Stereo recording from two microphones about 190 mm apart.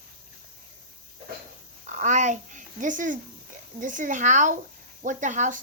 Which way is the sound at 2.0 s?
40° right (ahead or behind).